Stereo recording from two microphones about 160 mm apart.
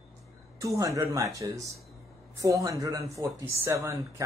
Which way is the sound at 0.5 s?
20° right (ahead or behind).